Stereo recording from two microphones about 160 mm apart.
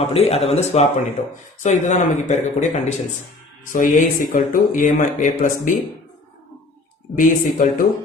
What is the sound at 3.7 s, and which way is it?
Speech, 55° left (ahead or behind).